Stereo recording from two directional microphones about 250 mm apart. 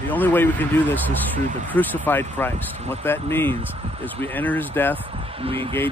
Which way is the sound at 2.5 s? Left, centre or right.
Right.